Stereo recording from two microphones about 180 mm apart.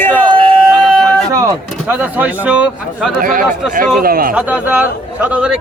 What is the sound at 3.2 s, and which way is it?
A man's voice, 50° right (ahead or behind).